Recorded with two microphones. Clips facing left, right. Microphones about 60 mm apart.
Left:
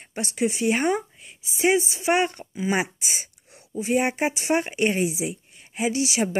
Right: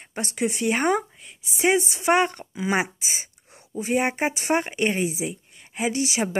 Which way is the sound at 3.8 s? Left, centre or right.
Right.